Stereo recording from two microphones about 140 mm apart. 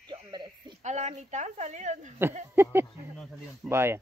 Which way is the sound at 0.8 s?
55° right (ahead or behind).